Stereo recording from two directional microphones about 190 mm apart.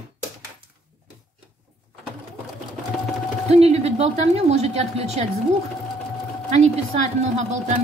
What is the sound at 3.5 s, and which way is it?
A woman's voice, 35° right (ahead or behind).